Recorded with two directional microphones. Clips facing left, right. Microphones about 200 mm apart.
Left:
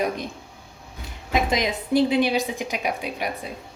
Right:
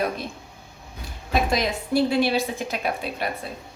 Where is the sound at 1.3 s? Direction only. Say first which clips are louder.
Even; 20° left (ahead or behind).